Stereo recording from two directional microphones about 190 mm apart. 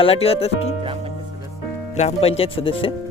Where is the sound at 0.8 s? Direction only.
30° right (ahead or behind).